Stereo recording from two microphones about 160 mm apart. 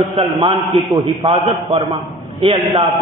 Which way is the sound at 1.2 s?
30° right (ahead or behind).